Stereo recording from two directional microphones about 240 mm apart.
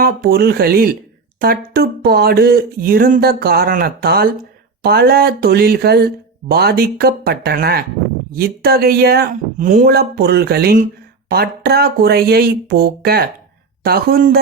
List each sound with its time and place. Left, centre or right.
0.0 s speech: right